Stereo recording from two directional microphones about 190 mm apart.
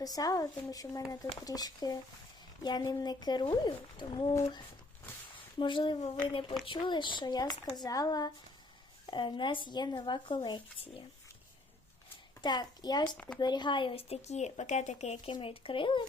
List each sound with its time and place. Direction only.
0.0 s speech: 20° left (ahead or behind)
12.4 s speech: 20° left (ahead or behind)